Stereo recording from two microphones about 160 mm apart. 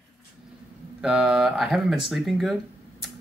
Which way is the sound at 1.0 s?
5° right (ahead or behind).